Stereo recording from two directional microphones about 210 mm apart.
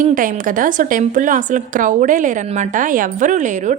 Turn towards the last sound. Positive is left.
turn(degrees=-35)  # may be behind; listen again after turning